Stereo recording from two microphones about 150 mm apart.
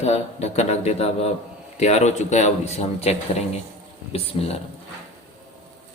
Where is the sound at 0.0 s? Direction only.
45° left (ahead or behind).